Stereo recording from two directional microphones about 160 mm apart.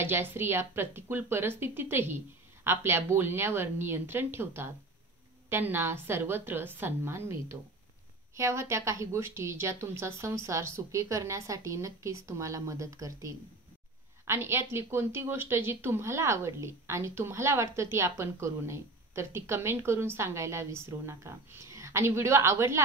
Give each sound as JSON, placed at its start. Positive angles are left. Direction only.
{"t": 0.0, "sound": "a woman's voice", "side_deg": -15}